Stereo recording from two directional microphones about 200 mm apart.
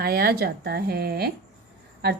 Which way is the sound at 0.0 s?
50° right (ahead or behind).